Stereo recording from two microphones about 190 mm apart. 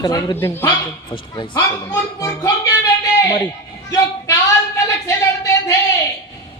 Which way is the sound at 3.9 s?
15° left (ahead or behind).